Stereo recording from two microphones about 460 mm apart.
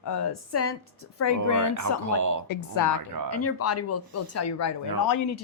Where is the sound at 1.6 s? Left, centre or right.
Right.